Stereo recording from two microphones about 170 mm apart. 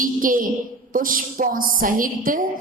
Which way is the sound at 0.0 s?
55° right (ahead or behind).